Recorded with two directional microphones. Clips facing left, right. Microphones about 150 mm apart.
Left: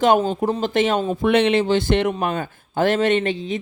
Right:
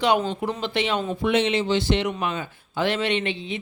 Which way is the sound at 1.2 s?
60° left (ahead or behind).